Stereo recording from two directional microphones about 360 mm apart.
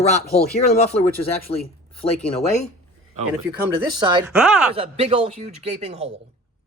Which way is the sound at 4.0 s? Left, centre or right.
Centre.